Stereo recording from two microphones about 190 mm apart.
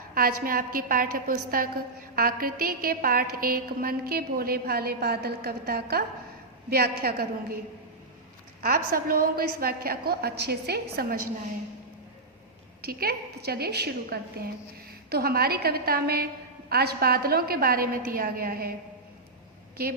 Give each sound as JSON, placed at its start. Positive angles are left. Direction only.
{"t": 0.1, "sound": "a woman's voice", "side_deg": -50}
{"t": 8.6, "sound": "a woman's voice", "side_deg": -50}
{"t": 12.8, "sound": "a woman's voice", "side_deg": -55}